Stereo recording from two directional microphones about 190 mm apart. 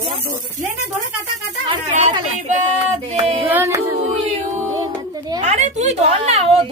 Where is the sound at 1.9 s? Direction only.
40° right (ahead or behind).